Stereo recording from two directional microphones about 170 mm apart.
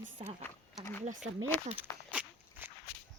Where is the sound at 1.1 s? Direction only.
45° right (ahead or behind).